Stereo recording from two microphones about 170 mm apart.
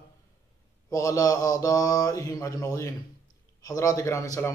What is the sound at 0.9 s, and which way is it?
Speech, 20° left (ahead or behind).